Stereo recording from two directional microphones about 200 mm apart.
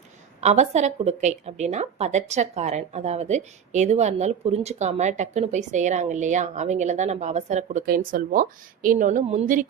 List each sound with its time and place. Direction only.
0.4 s a woman's voice: 35° right (ahead or behind)